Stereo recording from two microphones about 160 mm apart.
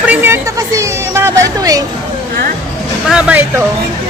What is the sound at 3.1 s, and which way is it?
Speech, 10° right (ahead or behind).